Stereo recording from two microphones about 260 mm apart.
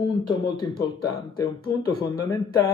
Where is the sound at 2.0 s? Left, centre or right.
Centre.